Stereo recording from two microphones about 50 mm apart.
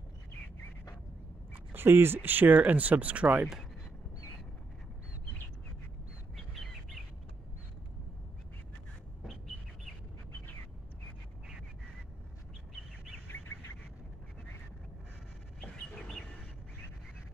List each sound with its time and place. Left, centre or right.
1.7 s speech: right
6.3 s bird: centre
15.7 s bird: centre